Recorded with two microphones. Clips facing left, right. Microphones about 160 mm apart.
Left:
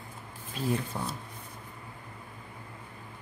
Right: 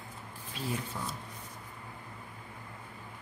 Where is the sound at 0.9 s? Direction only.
45° left (ahead or behind).